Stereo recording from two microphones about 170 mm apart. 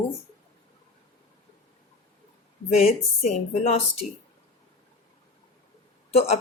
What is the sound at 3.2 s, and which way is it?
Speech, 40° left (ahead or behind).